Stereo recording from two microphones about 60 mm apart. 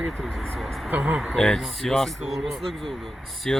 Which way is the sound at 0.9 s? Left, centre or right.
Right.